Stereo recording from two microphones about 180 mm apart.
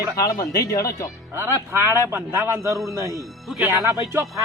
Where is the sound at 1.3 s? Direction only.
15° right (ahead or behind).